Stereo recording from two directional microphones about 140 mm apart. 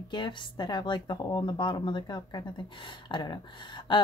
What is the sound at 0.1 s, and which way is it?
A woman's voice, 35° left (ahead or behind).